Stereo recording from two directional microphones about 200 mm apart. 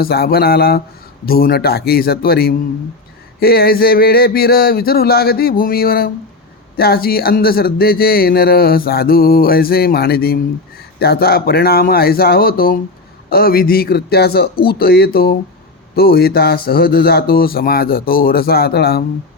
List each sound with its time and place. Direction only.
0.0 s speech: 50° left (ahead or behind)